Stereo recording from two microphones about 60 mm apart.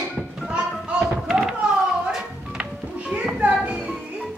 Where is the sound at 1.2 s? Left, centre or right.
Centre.